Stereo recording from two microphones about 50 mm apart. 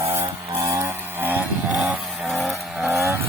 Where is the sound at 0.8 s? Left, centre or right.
Right.